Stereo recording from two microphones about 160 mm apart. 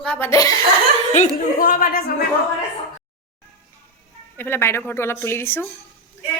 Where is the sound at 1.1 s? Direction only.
60° left (ahead or behind).